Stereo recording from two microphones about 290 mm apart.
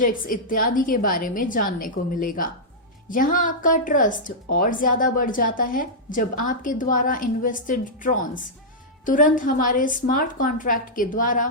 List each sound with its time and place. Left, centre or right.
0.0 s a woman's voice: left